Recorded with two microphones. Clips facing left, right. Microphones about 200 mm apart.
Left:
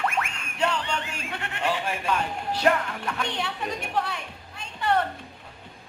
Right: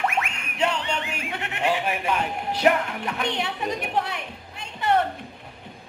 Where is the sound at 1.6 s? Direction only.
20° right (ahead or behind).